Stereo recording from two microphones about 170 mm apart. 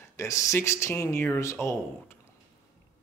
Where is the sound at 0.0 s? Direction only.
15° left (ahead or behind).